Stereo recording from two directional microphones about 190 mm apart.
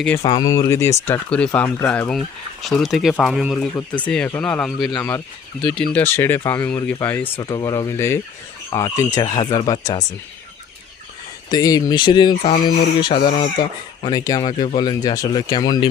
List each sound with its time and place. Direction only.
0.2 s speech: 25° left (ahead or behind); by 4.7 s 5° left (ahead or behind)
4.8 s speech: 25° left (ahead or behind)
11.5 s speech: 20° left (ahead or behind)